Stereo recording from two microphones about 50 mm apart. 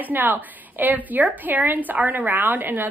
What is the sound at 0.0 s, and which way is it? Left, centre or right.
A woman's voice, right.